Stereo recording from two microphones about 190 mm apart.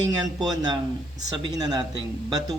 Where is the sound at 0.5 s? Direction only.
20° right (ahead or behind).